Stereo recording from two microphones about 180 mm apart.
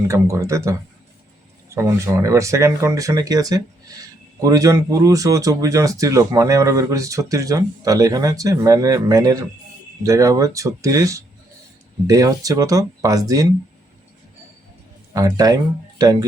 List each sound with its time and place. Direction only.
0.1 s speech: 15° right (ahead or behind)
15.1 s speech: 20° right (ahead or behind)